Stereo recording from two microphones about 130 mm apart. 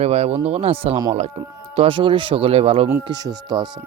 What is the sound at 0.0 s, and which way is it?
Speech, 55° right (ahead or behind).